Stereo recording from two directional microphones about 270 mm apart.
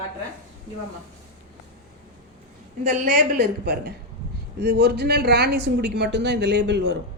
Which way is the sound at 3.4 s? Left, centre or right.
Right.